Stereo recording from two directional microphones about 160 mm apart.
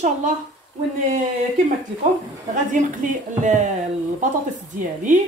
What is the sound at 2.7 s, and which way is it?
A woman's voice, 55° right (ahead or behind).